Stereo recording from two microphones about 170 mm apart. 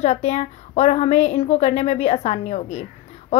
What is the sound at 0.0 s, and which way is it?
A woman's voice, 40° left (ahead or behind).